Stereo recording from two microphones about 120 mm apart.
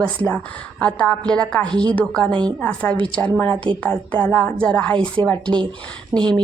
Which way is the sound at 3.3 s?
10° left (ahead or behind).